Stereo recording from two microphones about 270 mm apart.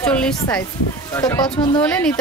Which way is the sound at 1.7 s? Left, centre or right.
Centre.